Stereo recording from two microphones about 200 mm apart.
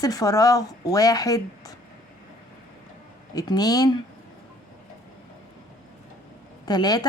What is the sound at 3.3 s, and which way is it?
Speech, 20° left (ahead or behind).